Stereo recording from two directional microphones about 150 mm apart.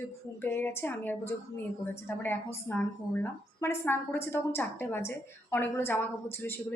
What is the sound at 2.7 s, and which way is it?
A woman's voice, 10° left (ahead or behind).